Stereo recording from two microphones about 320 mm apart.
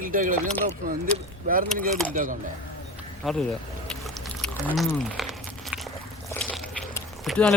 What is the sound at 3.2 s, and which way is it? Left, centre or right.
Speech, centre.